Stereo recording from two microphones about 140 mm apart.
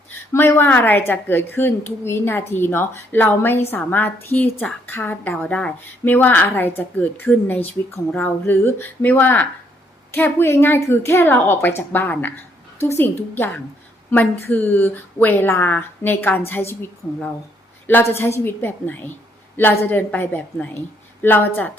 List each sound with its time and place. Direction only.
0.3 s a woman's voice: 15° left (ahead or behind)
17.8 s a woman's voice: 15° left (ahead or behind)